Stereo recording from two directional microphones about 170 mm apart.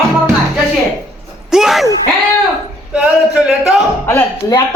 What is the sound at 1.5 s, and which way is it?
Groan, centre (ahead or behind).